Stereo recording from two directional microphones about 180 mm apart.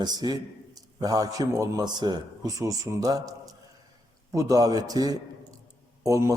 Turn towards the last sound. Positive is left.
turn(degrees=-15)  # may be behind; listen again after turning